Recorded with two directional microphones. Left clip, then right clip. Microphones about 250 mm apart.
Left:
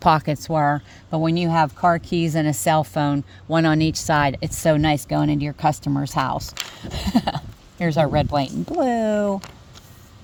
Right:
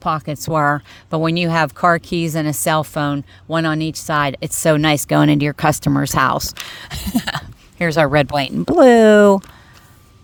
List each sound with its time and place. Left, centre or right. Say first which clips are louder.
0.0 s speech: left 3 dB; centre
0.3 s a woman's voice: right 4 dB; centre
2.0 s a woman's voice: right 2 dB; centre; by 9.4 s right